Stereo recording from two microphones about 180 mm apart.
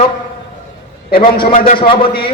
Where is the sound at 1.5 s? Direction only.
50° left (ahead or behind).